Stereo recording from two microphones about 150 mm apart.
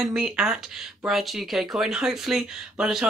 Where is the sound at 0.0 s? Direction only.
5° right (ahead or behind).